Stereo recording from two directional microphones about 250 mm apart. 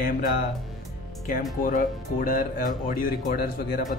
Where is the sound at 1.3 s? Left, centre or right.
Left.